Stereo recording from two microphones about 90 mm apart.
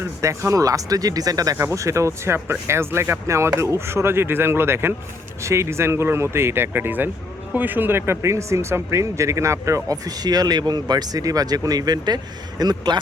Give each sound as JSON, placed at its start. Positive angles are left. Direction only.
{"t": 0.0, "sound": "speech", "side_deg": -30}
{"t": 1.5, "sound": "speech", "side_deg": -35}